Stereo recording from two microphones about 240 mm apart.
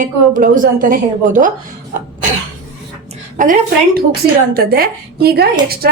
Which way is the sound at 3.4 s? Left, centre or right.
Right.